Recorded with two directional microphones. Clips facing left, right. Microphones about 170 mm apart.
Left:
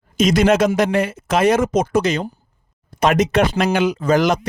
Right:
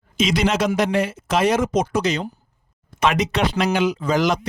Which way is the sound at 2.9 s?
40° left (ahead or behind).